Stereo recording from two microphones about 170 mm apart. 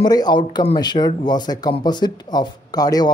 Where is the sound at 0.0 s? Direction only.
25° left (ahead or behind).